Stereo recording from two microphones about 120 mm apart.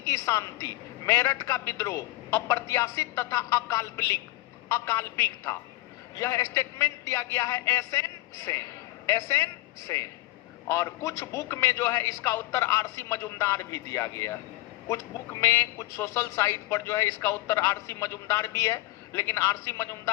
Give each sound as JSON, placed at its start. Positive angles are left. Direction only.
{"t": 0.0, "sound": "a woman's voice", "side_deg": 25}